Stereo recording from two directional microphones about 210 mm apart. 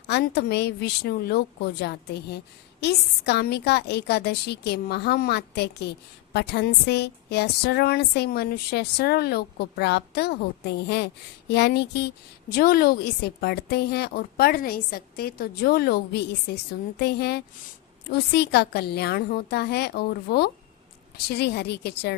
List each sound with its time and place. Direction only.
0.1 s a woman's voice: 50° left (ahead or behind)